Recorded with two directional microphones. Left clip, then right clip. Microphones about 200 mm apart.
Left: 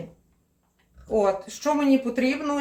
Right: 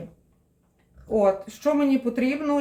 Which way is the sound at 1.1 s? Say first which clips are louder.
Right 1 dB; 25° right (ahead or behind).